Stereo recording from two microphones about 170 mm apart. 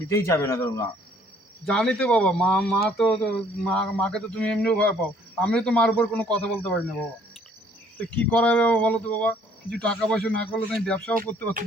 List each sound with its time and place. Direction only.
0.1 s speech: 15° left (ahead or behind)
1.6 s speech: 5° left (ahead or behind)
8.0 s speech: 10° left (ahead or behind)